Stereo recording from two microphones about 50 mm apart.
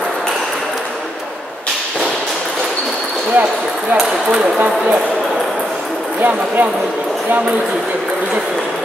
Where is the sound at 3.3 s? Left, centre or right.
Right.